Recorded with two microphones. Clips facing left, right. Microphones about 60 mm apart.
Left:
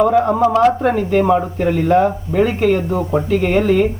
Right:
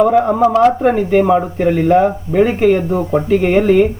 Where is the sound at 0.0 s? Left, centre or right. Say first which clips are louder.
Right 2 dB; centre.